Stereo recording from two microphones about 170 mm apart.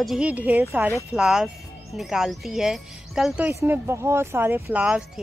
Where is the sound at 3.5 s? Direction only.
15° right (ahead or behind).